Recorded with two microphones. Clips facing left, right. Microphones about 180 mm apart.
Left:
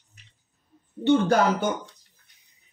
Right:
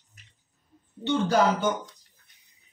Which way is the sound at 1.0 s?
55° left (ahead or behind).